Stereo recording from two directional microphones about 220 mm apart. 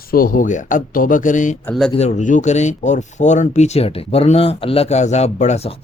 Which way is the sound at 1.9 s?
30° left (ahead or behind).